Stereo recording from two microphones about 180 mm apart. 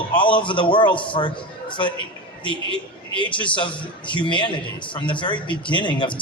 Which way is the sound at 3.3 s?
25° left (ahead or behind).